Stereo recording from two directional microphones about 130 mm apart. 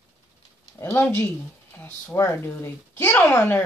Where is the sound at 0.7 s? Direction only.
20° left (ahead or behind).